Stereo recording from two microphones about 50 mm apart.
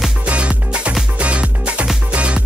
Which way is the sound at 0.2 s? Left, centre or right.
Right.